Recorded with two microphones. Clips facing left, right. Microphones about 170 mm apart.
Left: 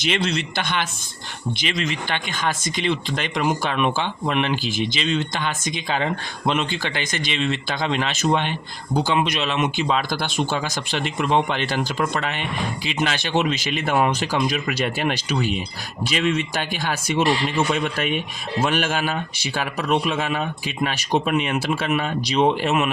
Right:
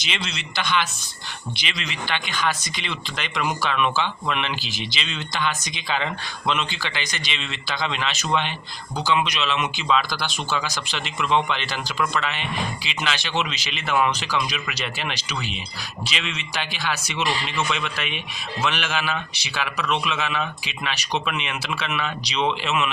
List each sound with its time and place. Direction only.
0.0 s speech: 55° left (ahead or behind)